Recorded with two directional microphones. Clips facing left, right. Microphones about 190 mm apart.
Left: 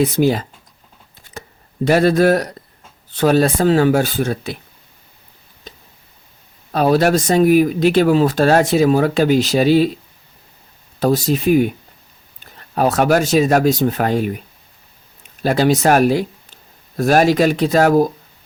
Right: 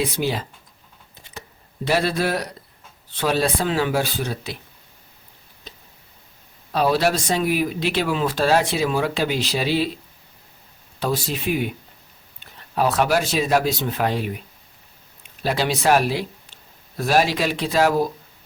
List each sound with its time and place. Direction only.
0.0 s speech: 45° left (ahead or behind)
1.3 s a sound: 45° left (ahead or behind)
3.2 s speech: 45° left (ahead or behind)
6.7 s speech: 45° left (ahead or behind)
11.0 s speech: 45° left (ahead or behind)